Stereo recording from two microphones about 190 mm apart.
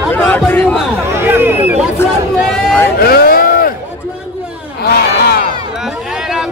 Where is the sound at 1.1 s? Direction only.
10° right (ahead or behind).